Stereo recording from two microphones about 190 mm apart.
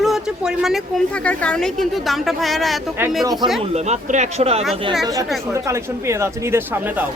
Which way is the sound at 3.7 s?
35° right (ahead or behind).